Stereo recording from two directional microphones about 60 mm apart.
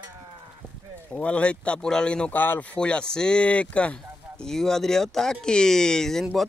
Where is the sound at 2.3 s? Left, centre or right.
Left.